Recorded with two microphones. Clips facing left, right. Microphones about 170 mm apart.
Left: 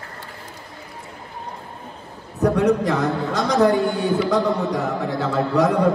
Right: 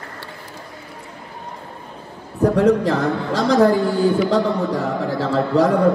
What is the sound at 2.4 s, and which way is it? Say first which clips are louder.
A man's voice: right 3 dB; 30° right (ahead or behind).